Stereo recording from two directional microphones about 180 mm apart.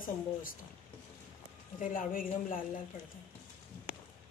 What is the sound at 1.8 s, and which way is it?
Speech, 50° left (ahead or behind).